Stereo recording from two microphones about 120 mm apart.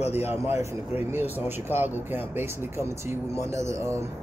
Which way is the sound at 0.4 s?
20° right (ahead or behind).